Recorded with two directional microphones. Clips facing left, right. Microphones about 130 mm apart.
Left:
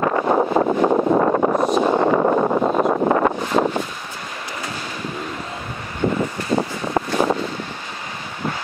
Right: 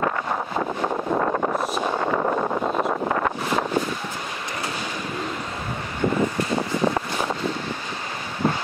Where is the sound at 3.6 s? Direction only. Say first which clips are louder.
Left 7 dB; 35° left (ahead or behind).